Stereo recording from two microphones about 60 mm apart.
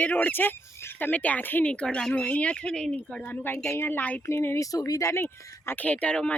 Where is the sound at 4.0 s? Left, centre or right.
Left.